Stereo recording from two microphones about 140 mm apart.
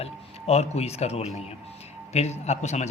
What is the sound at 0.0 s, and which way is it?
A man's voice, 50° left (ahead or behind).